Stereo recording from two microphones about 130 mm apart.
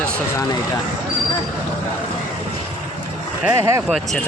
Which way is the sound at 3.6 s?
20° right (ahead or behind).